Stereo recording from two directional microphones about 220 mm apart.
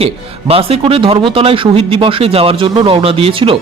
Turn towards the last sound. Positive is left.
turn(degrees=-25)  # may be behind; listen again after turning